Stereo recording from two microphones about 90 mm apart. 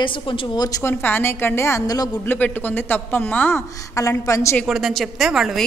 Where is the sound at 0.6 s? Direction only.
40° left (ahead or behind).